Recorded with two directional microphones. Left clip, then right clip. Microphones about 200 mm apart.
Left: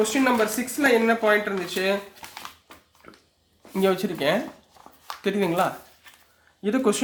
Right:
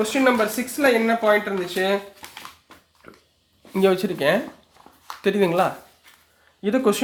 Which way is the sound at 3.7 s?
15° right (ahead or behind).